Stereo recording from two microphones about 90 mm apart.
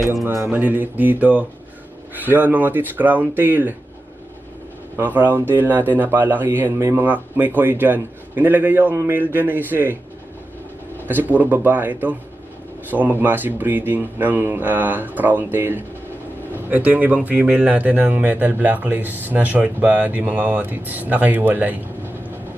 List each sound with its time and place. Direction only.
0.5 s a man's voice: 20° right (ahead or behind)
4.9 s a man's voice: 20° right (ahead or behind)
11.1 s a man's voice: 20° right (ahead or behind)